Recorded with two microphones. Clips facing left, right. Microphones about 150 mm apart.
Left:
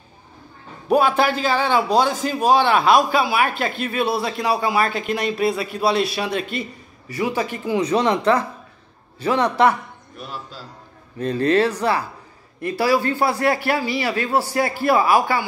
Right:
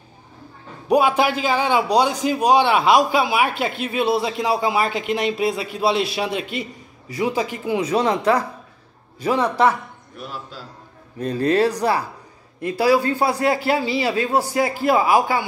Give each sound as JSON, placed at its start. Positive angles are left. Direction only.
{"t": 0.8, "sound": "a man's voice", "side_deg": -15}